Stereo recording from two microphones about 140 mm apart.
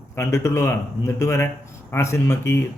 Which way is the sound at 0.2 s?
20° left (ahead or behind).